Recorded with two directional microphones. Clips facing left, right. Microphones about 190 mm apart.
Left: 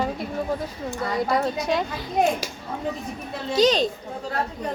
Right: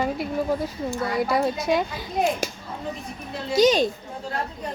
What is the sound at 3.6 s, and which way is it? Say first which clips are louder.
Speech: right 1 dB; 10° right (ahead or behind).